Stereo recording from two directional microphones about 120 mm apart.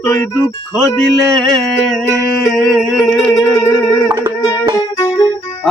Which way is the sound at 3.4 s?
20° left (ahead or behind).